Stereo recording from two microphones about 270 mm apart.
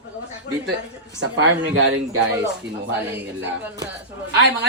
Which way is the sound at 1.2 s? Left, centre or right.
Right.